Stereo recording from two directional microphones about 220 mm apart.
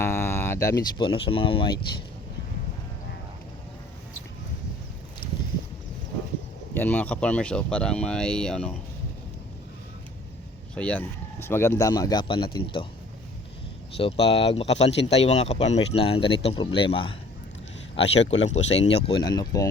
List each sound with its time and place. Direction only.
0.0 s speech: 10° left (ahead or behind)
5.2 s a sound: 20° left (ahead or behind)
6.7 s speech: 5° left (ahead or behind)
10.8 s speech: 5° left (ahead or behind); by 12.9 s 25° left (ahead or behind)
13.9 s speech: 25° left (ahead or behind)
14.7 s speech: 55° left (ahead or behind)
15.2 s speech: 30° left (ahead or behind)
18.6 s speech: 55° left (ahead or behind)
18.9 s speech: 25° left (ahead or behind)